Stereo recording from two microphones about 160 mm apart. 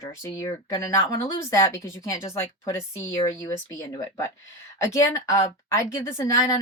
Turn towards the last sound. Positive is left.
turn(degrees=20)  # may be behind; listen again after turning